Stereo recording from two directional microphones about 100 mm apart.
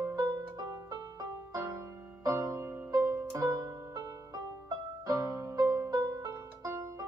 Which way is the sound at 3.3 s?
35° right (ahead or behind).